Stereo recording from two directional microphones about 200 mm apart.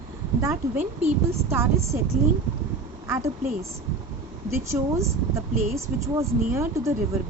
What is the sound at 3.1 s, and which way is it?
Speech, 15° right (ahead or behind).